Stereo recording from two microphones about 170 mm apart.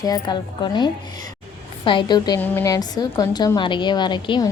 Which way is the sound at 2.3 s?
10° left (ahead or behind).